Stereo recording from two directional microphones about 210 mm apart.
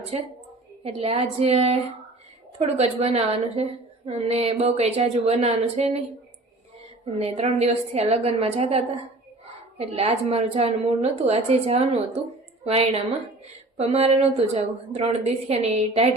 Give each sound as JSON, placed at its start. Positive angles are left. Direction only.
{"t": 0.9, "sound": "a woman's voice", "side_deg": -30}
{"t": 7.0, "sound": "a woman's voice", "side_deg": -30}